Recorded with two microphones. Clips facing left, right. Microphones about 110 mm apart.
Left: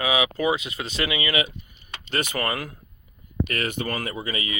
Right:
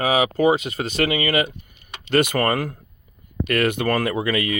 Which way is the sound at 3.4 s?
60° right (ahead or behind).